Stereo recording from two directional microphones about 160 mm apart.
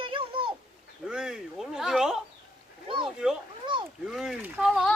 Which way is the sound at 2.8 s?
30° right (ahead or behind).